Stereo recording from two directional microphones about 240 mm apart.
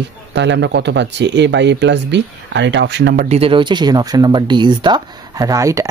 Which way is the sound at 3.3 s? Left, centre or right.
Right.